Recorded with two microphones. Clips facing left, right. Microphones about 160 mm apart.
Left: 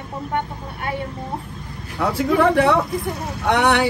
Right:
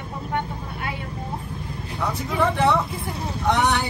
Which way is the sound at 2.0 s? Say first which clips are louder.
Left 6 dB; 65° left (ahead or behind).